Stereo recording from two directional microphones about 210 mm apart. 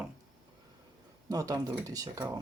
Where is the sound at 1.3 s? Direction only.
15° right (ahead or behind).